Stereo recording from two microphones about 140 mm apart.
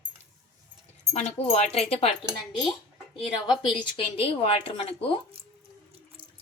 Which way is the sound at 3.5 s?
35° left (ahead or behind).